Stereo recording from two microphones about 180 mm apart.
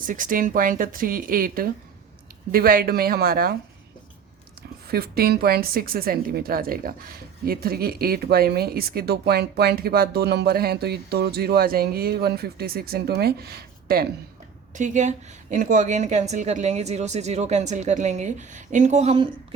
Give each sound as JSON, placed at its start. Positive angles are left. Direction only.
{"t": 0.0, "sound": "speech", "side_deg": -50}
{"t": 4.9, "sound": "speech", "side_deg": -60}
{"t": 14.8, "sound": "a woman's voice", "side_deg": -45}